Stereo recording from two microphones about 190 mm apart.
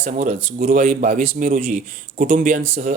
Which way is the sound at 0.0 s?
40° right (ahead or behind).